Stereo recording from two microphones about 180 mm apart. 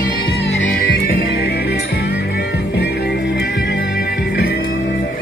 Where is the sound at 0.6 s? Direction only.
55° left (ahead or behind).